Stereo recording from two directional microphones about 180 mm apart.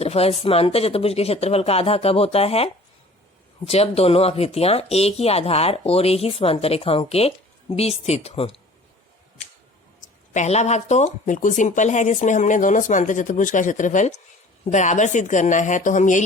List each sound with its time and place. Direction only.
0.0 s speech: 35° left (ahead or behind)
3.7 s speech: 35° left (ahead or behind)
10.3 s speech: 40° left (ahead or behind)